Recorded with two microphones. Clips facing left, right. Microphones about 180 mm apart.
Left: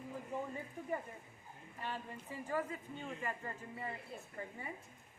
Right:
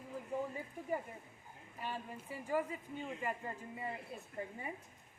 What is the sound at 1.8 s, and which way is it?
A man's voice, 10° right (ahead or behind).